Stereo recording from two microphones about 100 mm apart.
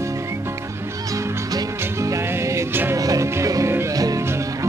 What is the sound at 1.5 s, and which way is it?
Music, 30° right (ahead or behind).